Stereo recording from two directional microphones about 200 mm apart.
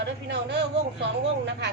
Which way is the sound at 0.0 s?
60° right (ahead or behind).